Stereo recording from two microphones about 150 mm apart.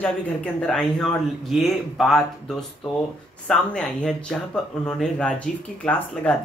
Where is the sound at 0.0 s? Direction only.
10° left (ahead or behind).